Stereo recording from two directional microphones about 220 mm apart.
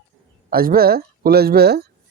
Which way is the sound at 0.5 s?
40° right (ahead or behind).